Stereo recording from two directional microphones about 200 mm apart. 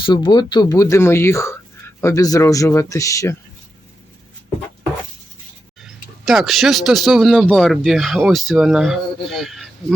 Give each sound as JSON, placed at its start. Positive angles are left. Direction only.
{"t": 0.0, "sound": "speech", "side_deg": 25}
{"t": 5.8, "sound": "speech", "side_deg": 0}